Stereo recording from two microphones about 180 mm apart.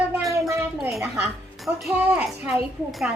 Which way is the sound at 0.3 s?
15° right (ahead or behind).